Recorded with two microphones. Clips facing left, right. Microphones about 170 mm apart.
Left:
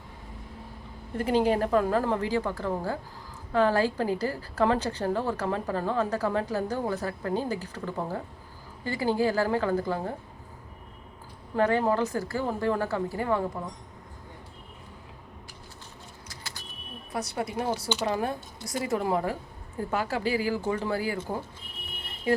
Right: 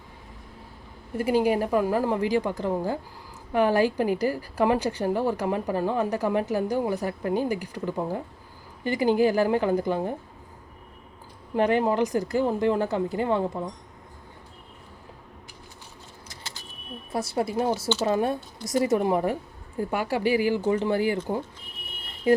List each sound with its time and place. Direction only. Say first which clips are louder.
1.1 s a woman's voice: right 2 dB; 10° right (ahead or behind)
11.5 s a woman's voice: right 2 dB; 15° right (ahead or behind)
17.1 s a woman's voice: right 5 dB; 25° right (ahead or behind)
22.3 s a sound: right 5 dB; 25° right (ahead or behind)